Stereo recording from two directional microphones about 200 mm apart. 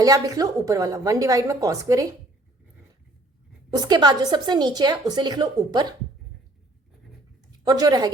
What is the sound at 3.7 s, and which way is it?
A woman's voice, 20° right (ahead or behind).